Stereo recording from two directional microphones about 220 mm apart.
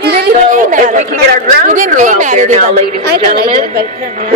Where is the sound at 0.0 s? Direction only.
45° right (ahead or behind).